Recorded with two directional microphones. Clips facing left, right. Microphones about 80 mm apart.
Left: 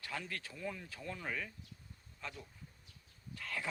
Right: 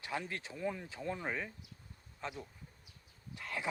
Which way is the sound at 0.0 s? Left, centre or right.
Right.